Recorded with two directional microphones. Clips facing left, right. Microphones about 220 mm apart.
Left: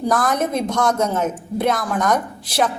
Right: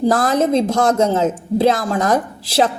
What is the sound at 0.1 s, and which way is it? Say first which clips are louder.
A woman's voice: right 1 dB; 25° right (ahead or behind).